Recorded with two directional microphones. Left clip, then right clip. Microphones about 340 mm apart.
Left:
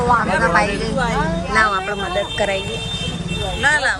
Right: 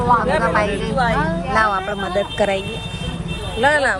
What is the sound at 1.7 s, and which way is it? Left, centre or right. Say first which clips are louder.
Speech: even; right.